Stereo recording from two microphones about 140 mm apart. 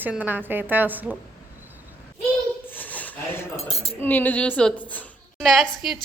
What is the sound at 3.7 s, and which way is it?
Speech, 45° left (ahead or behind).